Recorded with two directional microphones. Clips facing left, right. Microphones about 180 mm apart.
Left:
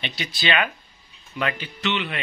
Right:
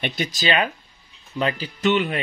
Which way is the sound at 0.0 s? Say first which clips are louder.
Right 4 dB; 50° right (ahead or behind).